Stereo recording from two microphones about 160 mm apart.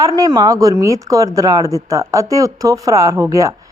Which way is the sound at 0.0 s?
25° right (ahead or behind).